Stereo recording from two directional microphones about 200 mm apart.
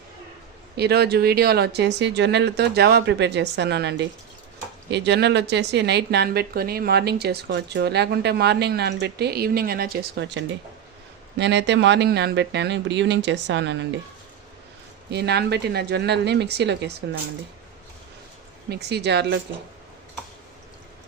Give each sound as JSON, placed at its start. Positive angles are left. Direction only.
{"t": 0.8, "sound": "speech", "side_deg": -55}
{"t": 15.1, "sound": "speech", "side_deg": -55}
{"t": 18.7, "sound": "speech", "side_deg": -55}